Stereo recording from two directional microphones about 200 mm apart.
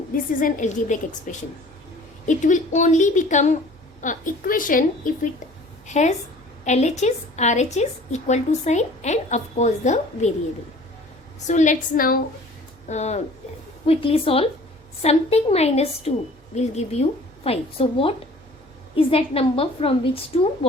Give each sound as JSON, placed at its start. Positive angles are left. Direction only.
{"t": 0.3, "sound": "a woman's voice", "side_deg": 40}
{"t": 11.4, "sound": "a woman's voice", "side_deg": 35}
{"t": 12.9, "sound": "a woman's voice", "side_deg": 35}